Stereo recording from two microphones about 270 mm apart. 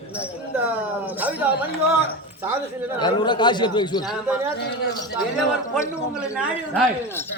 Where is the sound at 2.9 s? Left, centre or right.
Centre.